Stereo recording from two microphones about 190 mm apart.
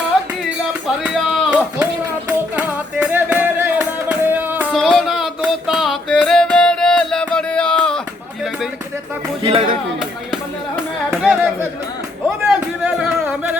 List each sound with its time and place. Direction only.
0.7 s music: 5° right (ahead or behind)
9.4 s speech: 30° right (ahead or behind)
11.1 s music: 5° right (ahead or behind)
12.5 s music: 5° right (ahead or behind)